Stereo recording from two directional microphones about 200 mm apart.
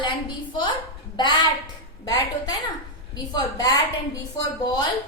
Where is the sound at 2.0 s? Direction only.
15° left (ahead or behind).